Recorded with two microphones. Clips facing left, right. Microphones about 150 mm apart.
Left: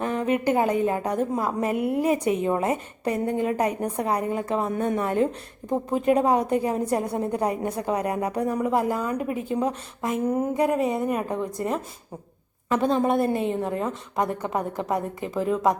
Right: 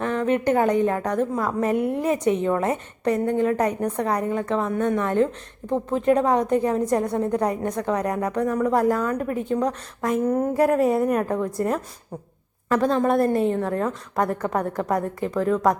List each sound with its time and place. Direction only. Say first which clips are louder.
0.0 s a woman's voice: right 2 dB; 10° left (ahead or behind)
1.4 s a woman's voice: right 2 dB; 25° left (ahead or behind)
1.6 s a woman's voice: right 1 dB; 10° left (ahead or behind)